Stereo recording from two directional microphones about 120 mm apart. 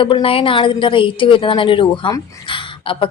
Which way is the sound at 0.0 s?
45° left (ahead or behind).